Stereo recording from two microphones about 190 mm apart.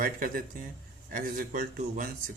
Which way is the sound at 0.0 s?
45° right (ahead or behind).